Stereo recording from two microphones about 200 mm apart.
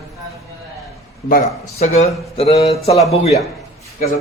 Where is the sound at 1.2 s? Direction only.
40° left (ahead or behind).